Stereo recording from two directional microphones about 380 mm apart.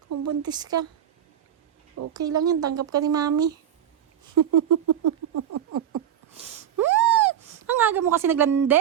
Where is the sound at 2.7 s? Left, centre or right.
Right.